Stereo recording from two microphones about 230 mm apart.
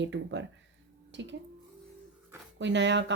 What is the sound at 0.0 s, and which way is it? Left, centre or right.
A woman's voice, right.